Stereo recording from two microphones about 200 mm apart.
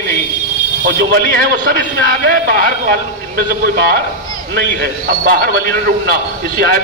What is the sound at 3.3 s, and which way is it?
Speech, 55° right (ahead or behind).